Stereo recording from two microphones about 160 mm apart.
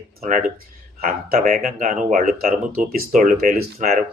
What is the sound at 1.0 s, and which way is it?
Speech, 60° right (ahead or behind).